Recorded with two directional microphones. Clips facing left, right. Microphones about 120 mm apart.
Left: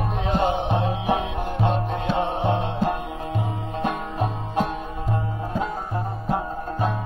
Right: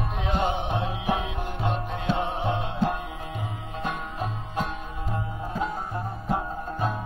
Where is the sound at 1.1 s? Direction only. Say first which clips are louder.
Left 4 dB; 45° left (ahead or behind).